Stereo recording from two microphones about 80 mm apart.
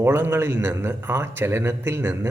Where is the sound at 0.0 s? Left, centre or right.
Right.